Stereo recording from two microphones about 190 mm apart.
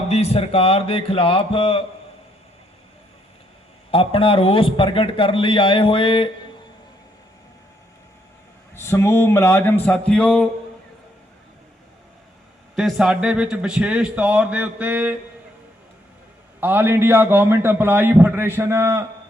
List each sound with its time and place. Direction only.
0.1 s a man's voice: 35° left (ahead or behind)
3.9 s a man's voice: 30° left (ahead or behind)
8.7 s speech: 15° left (ahead or behind)
12.7 s a man's voice: centre (ahead or behind)
16.6 s a man's voice: 10° right (ahead or behind)